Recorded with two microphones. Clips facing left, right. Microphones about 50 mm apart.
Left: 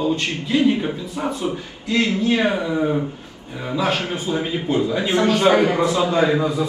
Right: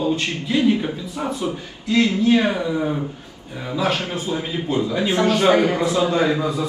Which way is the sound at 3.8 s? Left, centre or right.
Left.